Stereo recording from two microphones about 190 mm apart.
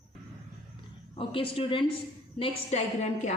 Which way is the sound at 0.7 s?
30° left (ahead or behind).